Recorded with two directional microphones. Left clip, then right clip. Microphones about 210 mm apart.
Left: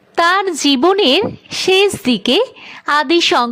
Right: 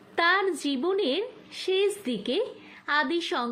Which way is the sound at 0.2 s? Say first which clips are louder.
Left 11 dB; 45° left (ahead or behind).